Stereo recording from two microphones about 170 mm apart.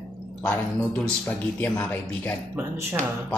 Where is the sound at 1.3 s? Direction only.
10° left (ahead or behind).